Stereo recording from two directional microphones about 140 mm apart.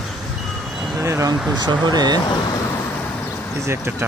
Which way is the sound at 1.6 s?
30° right (ahead or behind).